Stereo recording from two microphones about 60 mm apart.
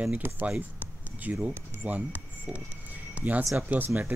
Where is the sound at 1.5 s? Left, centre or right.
Right.